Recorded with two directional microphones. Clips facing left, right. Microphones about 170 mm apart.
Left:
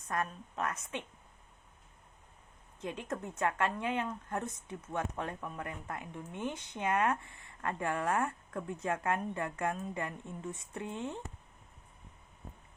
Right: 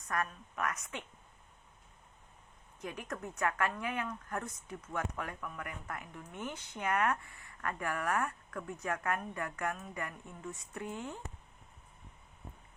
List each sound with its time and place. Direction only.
0.0 s speech: 25° left (ahead or behind)
2.8 s speech: 25° left (ahead or behind)